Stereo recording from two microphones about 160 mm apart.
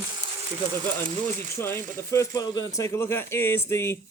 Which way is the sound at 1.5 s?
15° left (ahead or behind).